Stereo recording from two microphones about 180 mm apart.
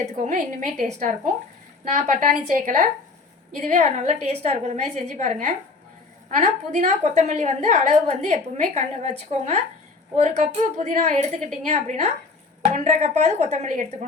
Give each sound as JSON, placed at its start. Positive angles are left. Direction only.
{"t": 0.0, "sound": "a woman's voice", "side_deg": -40}